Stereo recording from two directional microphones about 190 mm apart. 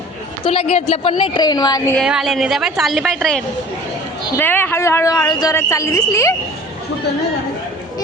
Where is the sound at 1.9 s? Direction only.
Centre (ahead or behind); by 6.4 s 15° left (ahead or behind).